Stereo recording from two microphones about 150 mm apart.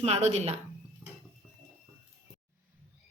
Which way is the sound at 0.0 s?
50° right (ahead or behind).